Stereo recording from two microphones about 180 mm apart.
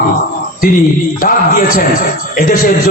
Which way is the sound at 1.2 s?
50° left (ahead or behind).